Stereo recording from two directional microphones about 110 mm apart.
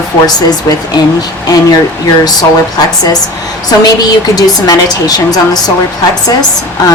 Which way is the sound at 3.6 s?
35° left (ahead or behind).